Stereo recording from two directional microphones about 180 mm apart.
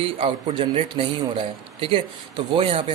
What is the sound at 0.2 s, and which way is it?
A man's voice, 30° right (ahead or behind).